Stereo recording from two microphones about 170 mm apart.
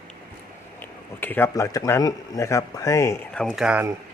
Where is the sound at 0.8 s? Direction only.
10° left (ahead or behind).